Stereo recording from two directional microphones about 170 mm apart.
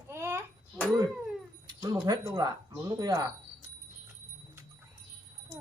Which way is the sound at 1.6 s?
20° right (ahead or behind).